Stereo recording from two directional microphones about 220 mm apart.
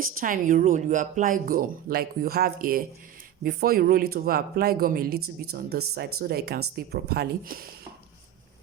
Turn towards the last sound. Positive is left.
turn(degrees=-40)  # may be behind; listen again after turning